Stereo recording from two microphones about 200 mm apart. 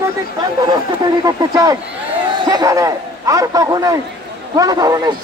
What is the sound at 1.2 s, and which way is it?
A man's voice, 20° right (ahead or behind).